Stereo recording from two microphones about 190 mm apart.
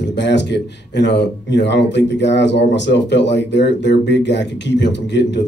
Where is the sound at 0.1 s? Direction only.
65° left (ahead or behind).